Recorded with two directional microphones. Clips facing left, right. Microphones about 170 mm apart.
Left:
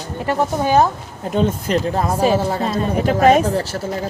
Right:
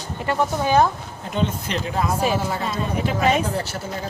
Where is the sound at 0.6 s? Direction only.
40° left (ahead or behind).